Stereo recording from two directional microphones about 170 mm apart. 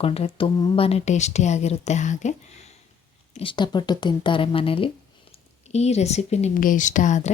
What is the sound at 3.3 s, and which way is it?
Speech, 30° left (ahead or behind).